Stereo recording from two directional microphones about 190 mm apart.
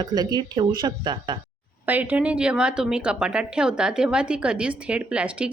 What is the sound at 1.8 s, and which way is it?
A woman's voice, 10° right (ahead or behind).